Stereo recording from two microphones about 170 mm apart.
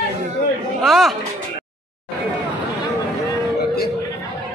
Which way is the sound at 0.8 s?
Centre (ahead or behind).